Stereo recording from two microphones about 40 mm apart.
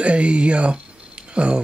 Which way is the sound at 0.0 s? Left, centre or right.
Right.